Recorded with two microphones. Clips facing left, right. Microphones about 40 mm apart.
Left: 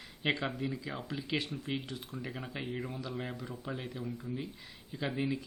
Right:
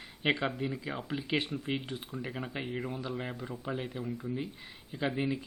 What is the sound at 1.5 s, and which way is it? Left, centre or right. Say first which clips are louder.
Speech: right 3 dB; centre.